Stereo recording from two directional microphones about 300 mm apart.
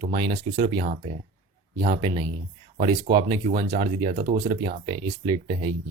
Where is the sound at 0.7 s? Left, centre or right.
Centre.